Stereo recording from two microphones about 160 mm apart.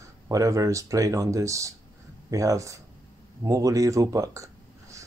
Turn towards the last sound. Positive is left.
turn(degrees=-20)  # may be behind; listen again after turning